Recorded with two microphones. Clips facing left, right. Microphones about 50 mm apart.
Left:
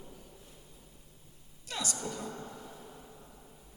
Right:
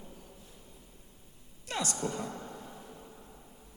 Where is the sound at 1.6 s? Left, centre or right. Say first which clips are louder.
Right 4 dB; right.